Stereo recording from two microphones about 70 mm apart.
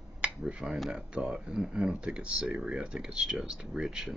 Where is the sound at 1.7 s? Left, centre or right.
Centre.